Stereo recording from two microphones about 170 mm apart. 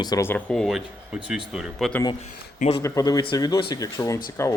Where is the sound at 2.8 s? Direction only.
20° left (ahead or behind).